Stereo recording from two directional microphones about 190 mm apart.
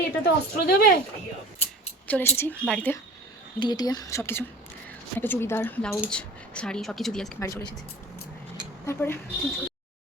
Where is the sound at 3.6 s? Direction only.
20° left (ahead or behind); by 7.4 s centre (ahead or behind).